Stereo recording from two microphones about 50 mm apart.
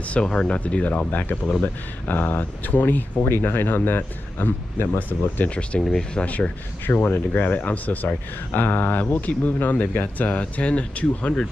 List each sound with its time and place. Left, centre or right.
0.1 s speech: centre
1.6 s speech: left
3.3 s speech: left
5.5 s speech: left
5.8 s speech: centre
6.2 s speech: left
10.4 s speech: left